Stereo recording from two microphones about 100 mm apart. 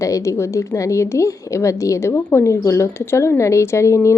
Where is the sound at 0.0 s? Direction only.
30° left (ahead or behind).